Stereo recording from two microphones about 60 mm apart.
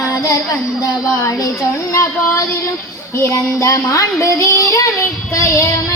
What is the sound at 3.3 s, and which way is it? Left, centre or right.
Child singing, left.